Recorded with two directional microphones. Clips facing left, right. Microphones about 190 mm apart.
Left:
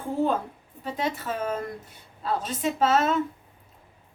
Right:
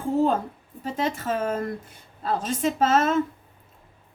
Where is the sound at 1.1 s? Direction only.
45° right (ahead or behind).